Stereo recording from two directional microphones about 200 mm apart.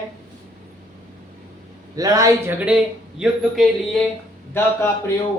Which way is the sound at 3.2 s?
Centre (ahead or behind).